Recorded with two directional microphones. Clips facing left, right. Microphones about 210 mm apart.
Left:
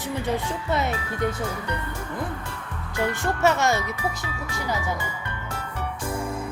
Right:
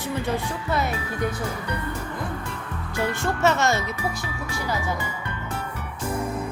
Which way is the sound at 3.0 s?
15° left (ahead or behind).